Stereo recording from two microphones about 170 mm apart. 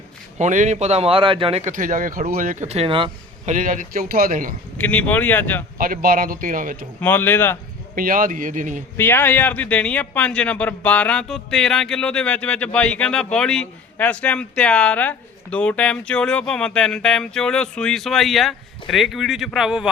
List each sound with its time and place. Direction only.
0.3 s a man's voice: 45° right (ahead or behind)
3.4 s a man's voice: 50° right (ahead or behind)
4.8 s speech: 10° left (ahead or behind)
5.7 s speech: 55° right (ahead or behind)
7.0 s speech: 10° left (ahead or behind)
7.9 s a man's voice: 55° right (ahead or behind)
9.0 s a man's voice: 10° left (ahead or behind); by 19.9 s 5° right (ahead or behind)